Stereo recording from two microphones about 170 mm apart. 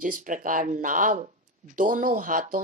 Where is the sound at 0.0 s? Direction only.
50° right (ahead or behind).